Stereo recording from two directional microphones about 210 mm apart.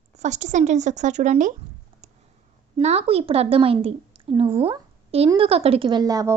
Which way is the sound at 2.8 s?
30° right (ahead or behind).